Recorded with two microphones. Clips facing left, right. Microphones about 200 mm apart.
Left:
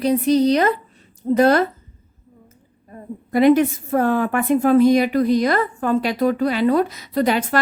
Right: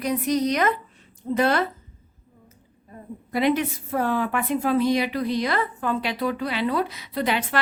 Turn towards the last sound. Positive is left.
turn(degrees=45)  # may be behind; listen again after turning